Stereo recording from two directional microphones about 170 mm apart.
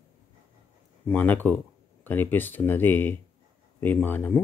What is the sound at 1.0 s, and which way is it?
Speech, 10° left (ahead or behind).